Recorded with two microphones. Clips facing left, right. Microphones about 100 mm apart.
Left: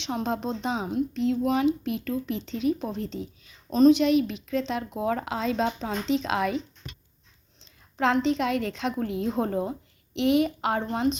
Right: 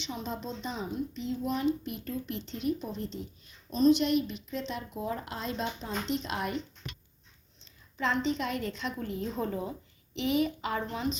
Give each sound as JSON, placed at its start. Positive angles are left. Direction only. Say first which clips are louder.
{"t": 0.0, "sound": "a woman's voice", "louder": "left 8 dB", "side_deg": 80}
{"t": 7.8, "sound": "a woman's voice", "louder": "left 7 dB", "side_deg": 80}
{"t": 10.2, "sound": "a woman's voice", "louder": "left 6 dB", "side_deg": 75}